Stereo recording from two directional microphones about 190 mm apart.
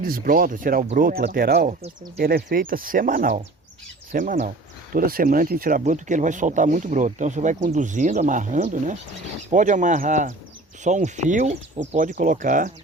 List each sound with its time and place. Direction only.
0.0 s speech: 45° right (ahead or behind)